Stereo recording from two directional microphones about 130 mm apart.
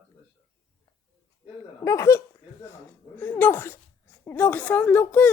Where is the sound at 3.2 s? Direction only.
15° left (ahead or behind).